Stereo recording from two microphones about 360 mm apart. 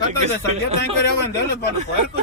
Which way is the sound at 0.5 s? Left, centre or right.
Centre.